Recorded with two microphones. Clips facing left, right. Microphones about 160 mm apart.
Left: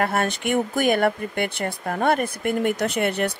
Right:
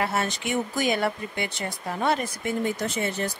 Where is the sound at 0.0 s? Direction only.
55° left (ahead or behind).